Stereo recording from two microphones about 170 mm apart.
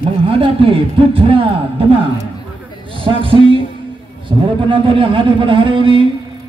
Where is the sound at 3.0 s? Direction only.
30° right (ahead or behind).